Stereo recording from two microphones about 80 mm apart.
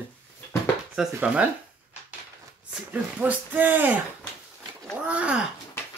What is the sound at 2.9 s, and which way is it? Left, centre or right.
Speech, right.